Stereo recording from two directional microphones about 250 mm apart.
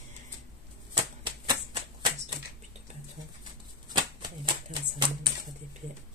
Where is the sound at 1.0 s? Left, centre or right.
Centre.